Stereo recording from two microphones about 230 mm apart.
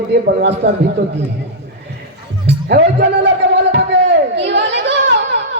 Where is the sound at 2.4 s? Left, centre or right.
Right.